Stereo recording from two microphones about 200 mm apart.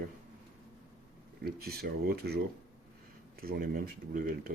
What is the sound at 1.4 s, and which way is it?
Speech, 50° right (ahead or behind).